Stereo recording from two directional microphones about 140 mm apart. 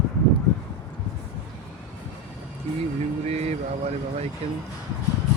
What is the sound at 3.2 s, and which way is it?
Speech, 50° right (ahead or behind).